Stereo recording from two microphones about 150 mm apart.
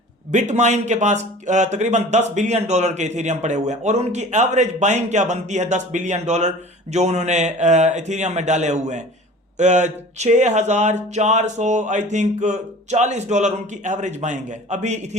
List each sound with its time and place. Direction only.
0.3 s a man's voice: 55° right (ahead or behind)